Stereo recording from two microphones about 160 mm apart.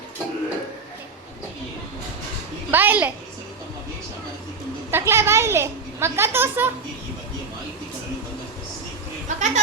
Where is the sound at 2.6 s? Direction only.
10° right (ahead or behind).